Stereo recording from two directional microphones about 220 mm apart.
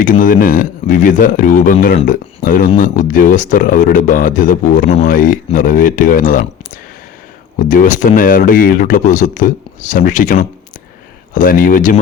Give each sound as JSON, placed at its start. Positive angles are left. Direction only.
{"t": 0.0, "sound": "speech", "side_deg": 40}
{"t": 7.7, "sound": "speech", "side_deg": 35}